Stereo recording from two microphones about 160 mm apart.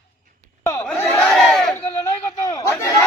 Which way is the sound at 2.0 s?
20° left (ahead or behind).